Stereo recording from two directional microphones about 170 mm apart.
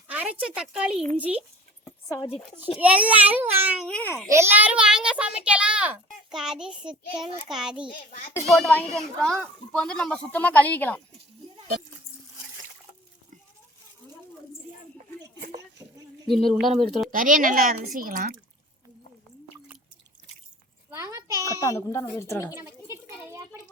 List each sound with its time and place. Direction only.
0.1 s speech: 10° right (ahead or behind)
2.7 s a child's voice: 10° right (ahead or behind)
3.8 s a child's voice: 5° left (ahead or behind)
4.3 s a child's voice: 15° right (ahead or behind); by 11.0 s 10° left (ahead or behind)
16.2 s a child's voice: centre (ahead or behind)
17.1 s a woman's voice: 55° right (ahead or behind)
20.9 s a sound: 20° right (ahead or behind)
21.4 s a woman's voice: 20° left (ahead or behind)
22.5 s a sound: 15° right (ahead or behind)